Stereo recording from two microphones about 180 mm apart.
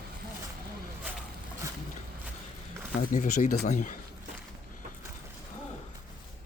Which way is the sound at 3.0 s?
45° left (ahead or behind).